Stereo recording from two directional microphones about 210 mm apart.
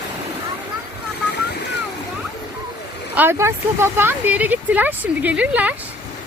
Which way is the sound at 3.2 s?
10° right (ahead or behind).